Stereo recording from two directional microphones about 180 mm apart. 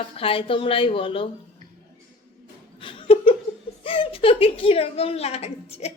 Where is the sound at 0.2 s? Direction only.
30° left (ahead or behind).